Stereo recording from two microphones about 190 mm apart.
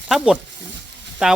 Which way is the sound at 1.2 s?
5° right (ahead or behind).